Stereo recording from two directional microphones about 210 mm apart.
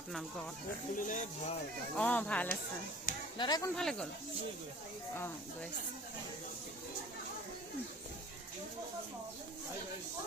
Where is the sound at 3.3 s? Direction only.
20° left (ahead or behind).